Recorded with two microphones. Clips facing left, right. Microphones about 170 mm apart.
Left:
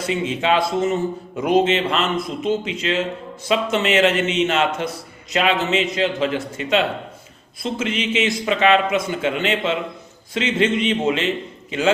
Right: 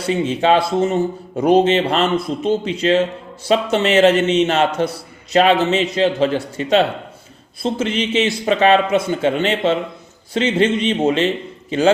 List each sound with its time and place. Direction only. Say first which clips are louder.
0.0 s a man's voice: right 4 dB; 35° right (ahead or behind)